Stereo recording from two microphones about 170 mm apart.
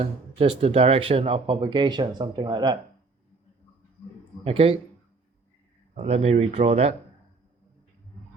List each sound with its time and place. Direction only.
0.0 s speech: 35° right (ahead or behind)
4.4 s speech: 35° right (ahead or behind)
6.1 s speech: 40° right (ahead or behind)